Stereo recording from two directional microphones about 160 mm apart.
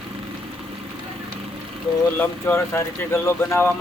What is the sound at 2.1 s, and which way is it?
Speech, 15° left (ahead or behind).